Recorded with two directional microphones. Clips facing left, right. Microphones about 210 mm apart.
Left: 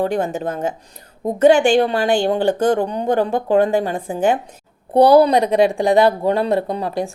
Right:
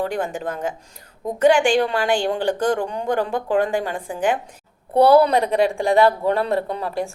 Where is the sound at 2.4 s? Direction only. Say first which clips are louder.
Left 4 dB; 25° left (ahead or behind).